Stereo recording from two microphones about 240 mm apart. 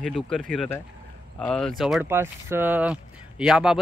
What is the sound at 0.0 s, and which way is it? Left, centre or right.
Speech, centre.